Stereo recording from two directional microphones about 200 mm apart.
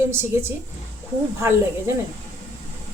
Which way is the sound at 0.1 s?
10° right (ahead or behind).